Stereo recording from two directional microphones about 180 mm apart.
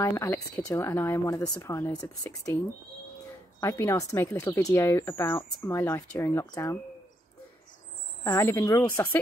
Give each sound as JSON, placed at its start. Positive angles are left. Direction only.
{"t": 0.0, "sound": "speech", "side_deg": 15}
{"t": 3.6, "sound": "speech", "side_deg": 15}
{"t": 8.2, "sound": "speech", "side_deg": 15}